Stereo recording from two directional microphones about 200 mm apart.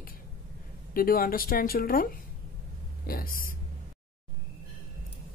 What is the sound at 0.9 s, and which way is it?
Speech, 45° left (ahead or behind).